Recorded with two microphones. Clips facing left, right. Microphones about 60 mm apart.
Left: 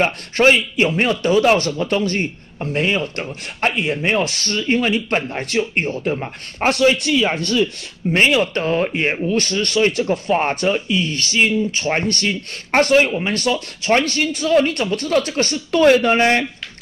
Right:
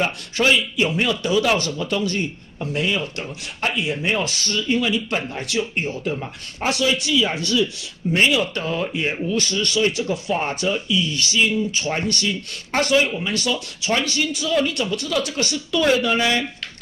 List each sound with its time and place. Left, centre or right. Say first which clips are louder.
0.0 s a man's voice: left 5 dB; left